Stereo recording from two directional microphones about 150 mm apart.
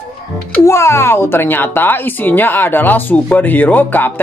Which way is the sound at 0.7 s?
20° left (ahead or behind).